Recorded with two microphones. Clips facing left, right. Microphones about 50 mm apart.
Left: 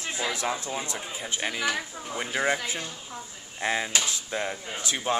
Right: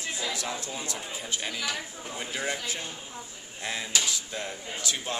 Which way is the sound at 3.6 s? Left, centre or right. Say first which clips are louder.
Left 4 dB; left.